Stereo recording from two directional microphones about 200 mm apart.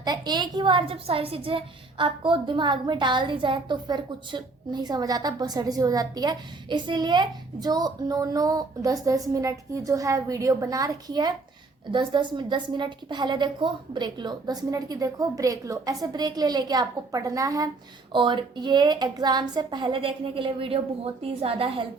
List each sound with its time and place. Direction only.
0.0 s a woman's voice: 20° right (ahead or behind)